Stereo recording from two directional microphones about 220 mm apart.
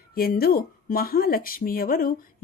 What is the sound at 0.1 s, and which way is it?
Speech, 40° left (ahead or behind).